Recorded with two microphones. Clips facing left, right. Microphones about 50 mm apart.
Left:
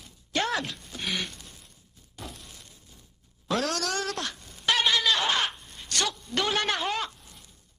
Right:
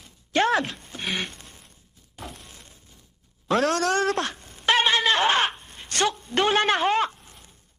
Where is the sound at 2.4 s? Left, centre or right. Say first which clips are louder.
Right 2 dB; right.